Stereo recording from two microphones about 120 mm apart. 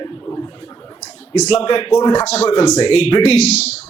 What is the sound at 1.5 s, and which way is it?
Speech, 50° left (ahead or behind).